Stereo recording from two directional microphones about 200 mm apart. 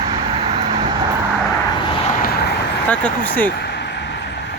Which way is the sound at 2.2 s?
50° left (ahead or behind).